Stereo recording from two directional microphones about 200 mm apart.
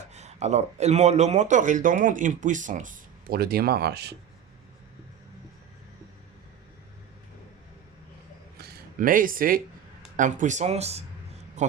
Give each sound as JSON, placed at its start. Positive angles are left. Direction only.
{"t": 0.1, "sound": "speech", "side_deg": -35}
{"t": 8.5, "sound": "a sound", "side_deg": -50}
{"t": 10.2, "sound": "speech", "side_deg": -40}